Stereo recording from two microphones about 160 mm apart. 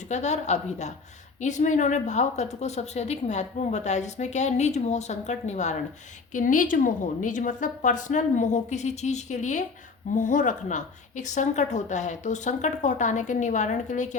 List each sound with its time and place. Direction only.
0.1 s a woman's voice: 45° left (ahead or behind)